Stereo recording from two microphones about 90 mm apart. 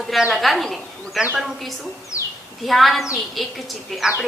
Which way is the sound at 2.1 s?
35° left (ahead or behind).